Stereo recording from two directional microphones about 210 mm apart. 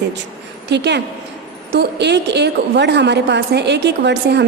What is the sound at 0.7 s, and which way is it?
A woman's voice, 55° right (ahead or behind).